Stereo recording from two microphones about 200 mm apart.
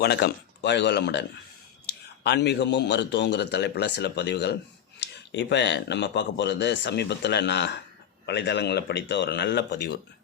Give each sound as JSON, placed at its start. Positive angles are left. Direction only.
{"t": 0.0, "sound": "speech", "side_deg": 55}
{"t": 1.9, "sound": "a sound", "side_deg": 55}
{"t": 2.2, "sound": "speech", "side_deg": 60}